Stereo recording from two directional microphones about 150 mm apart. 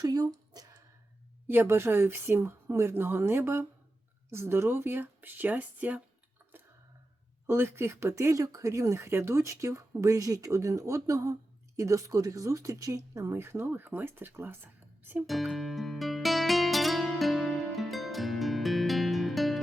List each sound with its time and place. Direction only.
0.0 s speech: 25° right (ahead or behind)
1.5 s speech: 15° right (ahead or behind)
7.4 s speech: 15° right (ahead or behind)
15.3 s music: centre (ahead or behind)